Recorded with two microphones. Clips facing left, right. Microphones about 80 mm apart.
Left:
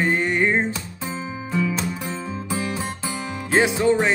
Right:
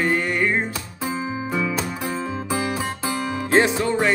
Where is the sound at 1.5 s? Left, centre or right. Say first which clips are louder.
Left 3 dB; right.